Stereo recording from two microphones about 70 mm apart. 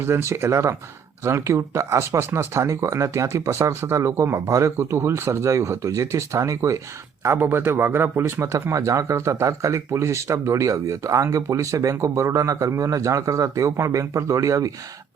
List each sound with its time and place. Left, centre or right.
0.0 s speech: right
7.3 s speech: right
8.2 s speech: right